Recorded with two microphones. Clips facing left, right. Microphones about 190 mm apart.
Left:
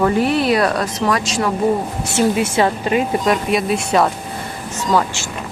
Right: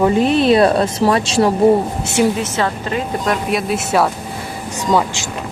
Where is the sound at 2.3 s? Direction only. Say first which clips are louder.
Left 3 dB; 10° left (ahead or behind).